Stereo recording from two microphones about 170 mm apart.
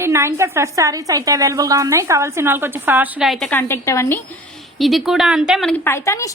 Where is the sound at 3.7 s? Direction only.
15° left (ahead or behind).